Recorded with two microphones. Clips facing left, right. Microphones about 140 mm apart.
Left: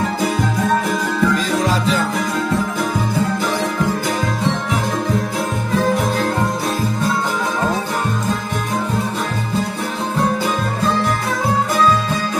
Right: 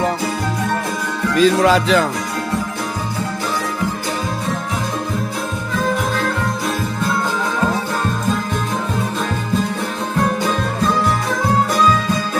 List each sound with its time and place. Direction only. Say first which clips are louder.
1.4 s music: right 5 dB; 80° right